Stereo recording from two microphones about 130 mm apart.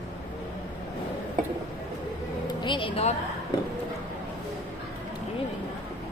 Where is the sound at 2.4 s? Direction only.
35° left (ahead or behind).